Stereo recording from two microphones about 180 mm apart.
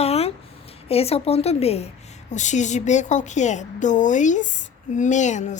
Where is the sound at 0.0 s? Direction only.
35° left (ahead or behind).